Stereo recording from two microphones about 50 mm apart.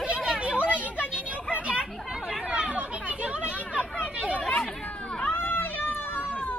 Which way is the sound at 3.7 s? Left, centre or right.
Left.